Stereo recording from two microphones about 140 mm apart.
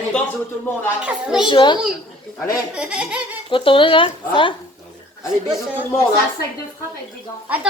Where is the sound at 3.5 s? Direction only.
40° left (ahead or behind).